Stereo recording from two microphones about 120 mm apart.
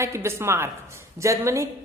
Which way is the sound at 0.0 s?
25° right (ahead or behind).